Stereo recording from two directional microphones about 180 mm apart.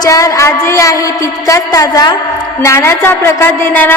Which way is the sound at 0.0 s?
20° left (ahead or behind).